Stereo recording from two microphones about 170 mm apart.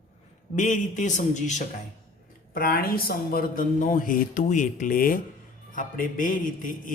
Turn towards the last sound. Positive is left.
turn(degrees=55)  # may be behind; listen again after turning